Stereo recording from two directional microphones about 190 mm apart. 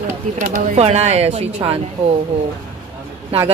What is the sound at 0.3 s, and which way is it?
Speech, 40° right (ahead or behind).